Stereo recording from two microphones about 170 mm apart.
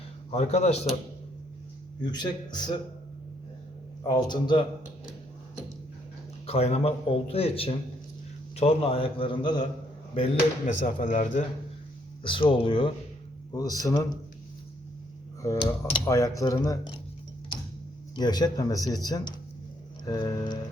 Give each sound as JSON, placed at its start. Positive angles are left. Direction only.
{"t": 0.3, "sound": "speech", "side_deg": 40}
{"t": 2.0, "sound": "speech", "side_deg": 25}
{"t": 4.0, "sound": "speech", "side_deg": 25}
{"t": 6.4, "sound": "speech", "side_deg": 35}
{"t": 10.8, "sound": "speech", "side_deg": 50}
{"t": 12.2, "sound": "speech", "side_deg": 30}
{"t": 13.5, "sound": "speech", "side_deg": 20}
{"t": 15.4, "sound": "speech", "side_deg": 20}
{"t": 18.1, "sound": "speech", "side_deg": 25}